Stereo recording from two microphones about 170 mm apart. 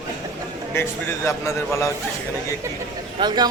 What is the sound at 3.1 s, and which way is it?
Speech, 25° right (ahead or behind).